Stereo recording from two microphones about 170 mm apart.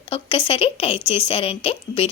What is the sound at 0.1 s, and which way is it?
Speech, 35° left (ahead or behind).